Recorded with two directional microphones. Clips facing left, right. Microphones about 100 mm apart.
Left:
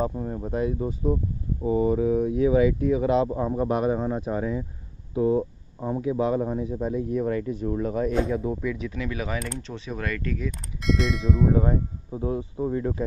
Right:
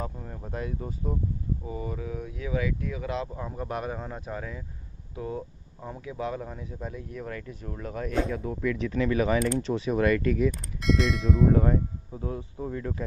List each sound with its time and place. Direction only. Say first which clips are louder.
0.0 s speech: left 9 dB; 25° left (ahead or behind)
1.6 s speech: left 13 dB; 30° left (ahead or behind); by 11.6 s centre (ahead or behind)
11.6 s speech: even; 15° left (ahead or behind)